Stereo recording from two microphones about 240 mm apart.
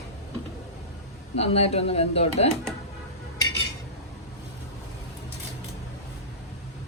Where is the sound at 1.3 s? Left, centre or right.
Left.